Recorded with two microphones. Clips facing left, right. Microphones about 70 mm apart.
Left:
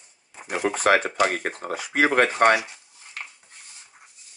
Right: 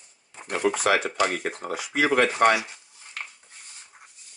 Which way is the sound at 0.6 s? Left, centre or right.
Left.